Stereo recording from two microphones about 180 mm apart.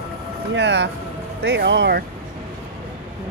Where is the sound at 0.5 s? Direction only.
75° right (ahead or behind).